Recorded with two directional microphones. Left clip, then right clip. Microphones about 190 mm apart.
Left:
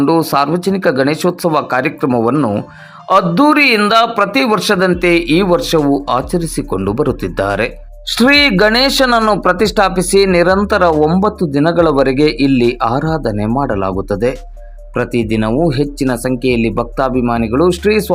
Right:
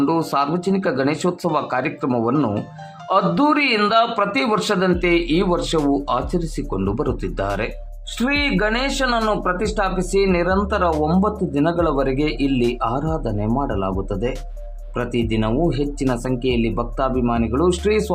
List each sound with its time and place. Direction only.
0.0 s a man's voice: 25° left (ahead or behind)
8.1 s speech: 35° left (ahead or behind)
9.0 s a man's voice: 20° left (ahead or behind)
9.4 s a man's voice: 35° left (ahead or behind)